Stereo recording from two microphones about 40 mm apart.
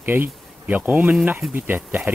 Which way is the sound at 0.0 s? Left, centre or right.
Right.